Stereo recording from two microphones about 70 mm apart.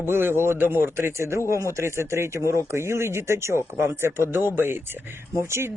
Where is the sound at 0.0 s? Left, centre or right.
Right.